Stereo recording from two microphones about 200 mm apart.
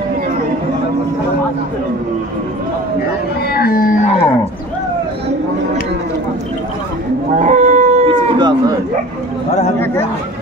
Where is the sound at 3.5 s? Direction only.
50° left (ahead or behind).